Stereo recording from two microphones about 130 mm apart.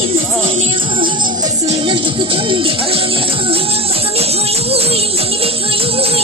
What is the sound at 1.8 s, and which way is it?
Music, 40° right (ahead or behind).